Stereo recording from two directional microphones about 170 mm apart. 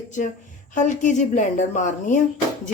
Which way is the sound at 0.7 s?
45° left (ahead or behind).